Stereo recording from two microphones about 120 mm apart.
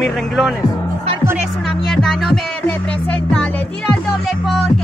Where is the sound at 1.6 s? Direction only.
5° left (ahead or behind).